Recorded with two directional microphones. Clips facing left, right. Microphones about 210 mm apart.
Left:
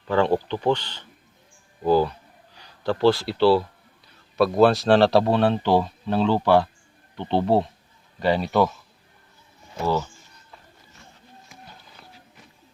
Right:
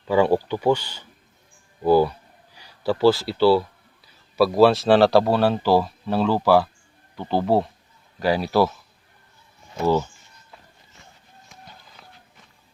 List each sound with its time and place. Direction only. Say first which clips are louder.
0.1 s speech: right 2 dB; 10° right (ahead or behind)
9.8 s speech: right 4 dB; 15° right (ahead or behind)
12.0 s a sound: even; centre (ahead or behind)